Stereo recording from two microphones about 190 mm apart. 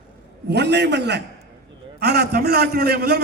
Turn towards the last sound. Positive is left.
turn(degrees=-55)  # may be behind; listen again after turning